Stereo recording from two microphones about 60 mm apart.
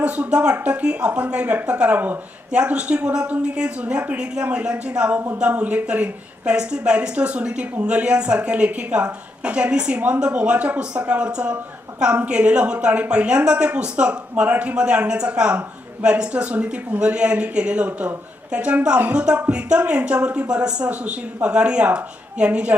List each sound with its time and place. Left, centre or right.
0.0 s a woman's voice: centre